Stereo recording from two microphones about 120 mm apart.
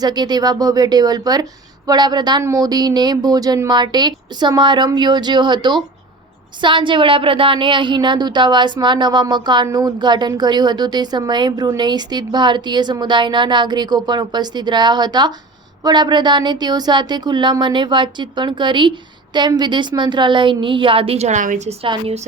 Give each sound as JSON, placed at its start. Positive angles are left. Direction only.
{"t": 0.0, "sound": "speech", "side_deg": -35}
{"t": 21.8, "sound": "a woman's voice", "side_deg": -60}